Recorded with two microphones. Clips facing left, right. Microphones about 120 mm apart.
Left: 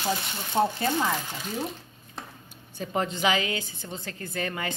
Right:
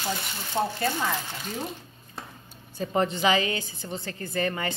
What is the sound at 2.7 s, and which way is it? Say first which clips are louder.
A woman's voice: right 3 dB; centre (ahead or behind).